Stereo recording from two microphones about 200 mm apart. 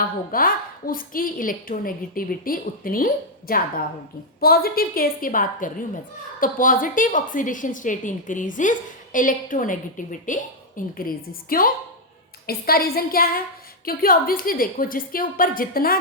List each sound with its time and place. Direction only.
0.3 s a woman's voice: 45° left (ahead or behind)